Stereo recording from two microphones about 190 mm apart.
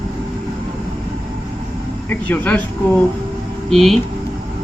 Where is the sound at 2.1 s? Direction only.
10° left (ahead or behind).